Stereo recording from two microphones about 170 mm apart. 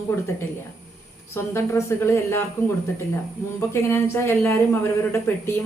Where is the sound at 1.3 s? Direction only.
15° left (ahead or behind).